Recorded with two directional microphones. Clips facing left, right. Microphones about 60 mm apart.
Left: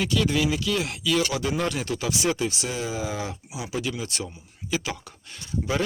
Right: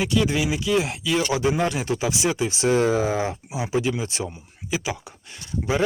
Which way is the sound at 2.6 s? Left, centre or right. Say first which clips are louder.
Right 10 dB; right.